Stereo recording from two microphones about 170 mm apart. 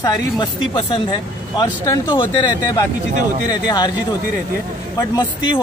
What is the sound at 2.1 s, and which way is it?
Speech, 25° left (ahead or behind).